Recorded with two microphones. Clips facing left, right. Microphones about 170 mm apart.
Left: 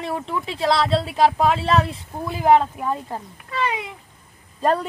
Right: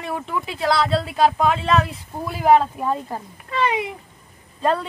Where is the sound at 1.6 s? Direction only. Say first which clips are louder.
Even; 30° left (ahead or behind).